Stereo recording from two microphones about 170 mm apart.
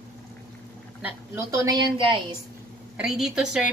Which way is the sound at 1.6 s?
25° right (ahead or behind).